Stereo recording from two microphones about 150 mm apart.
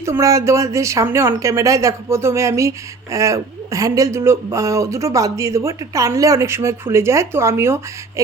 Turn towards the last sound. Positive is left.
turn(degrees=-20)  # may be behind; listen again after turning